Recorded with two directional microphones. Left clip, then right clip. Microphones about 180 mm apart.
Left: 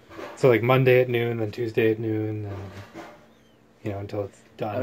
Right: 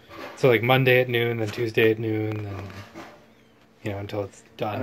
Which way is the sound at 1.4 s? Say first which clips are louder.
Right 2 dB; 15° right (ahead or behind).